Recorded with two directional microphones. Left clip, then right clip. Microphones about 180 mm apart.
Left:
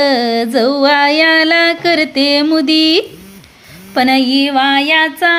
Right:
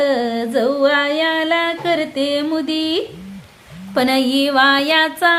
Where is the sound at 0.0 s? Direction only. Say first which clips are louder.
Left 5 dB; 25° left (ahead or behind).